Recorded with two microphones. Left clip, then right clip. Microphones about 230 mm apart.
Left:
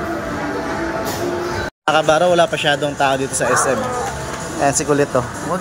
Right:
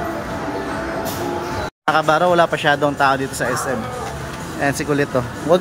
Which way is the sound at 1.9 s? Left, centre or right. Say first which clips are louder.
Left 1 dB; centre.